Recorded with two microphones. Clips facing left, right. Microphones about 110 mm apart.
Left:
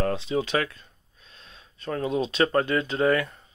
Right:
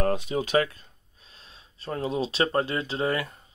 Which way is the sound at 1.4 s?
35° right (ahead or behind).